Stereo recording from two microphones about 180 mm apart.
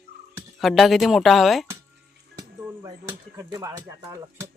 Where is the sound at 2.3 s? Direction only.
20° right (ahead or behind).